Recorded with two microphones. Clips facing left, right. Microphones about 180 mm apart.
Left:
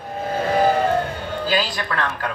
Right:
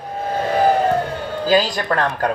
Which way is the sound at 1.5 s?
45° right (ahead or behind).